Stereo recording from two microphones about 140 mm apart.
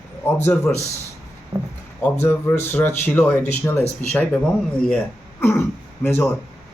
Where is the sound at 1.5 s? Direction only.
25° right (ahead or behind).